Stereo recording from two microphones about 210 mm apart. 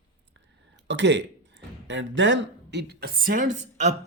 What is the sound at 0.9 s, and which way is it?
Speech, 55° right (ahead or behind).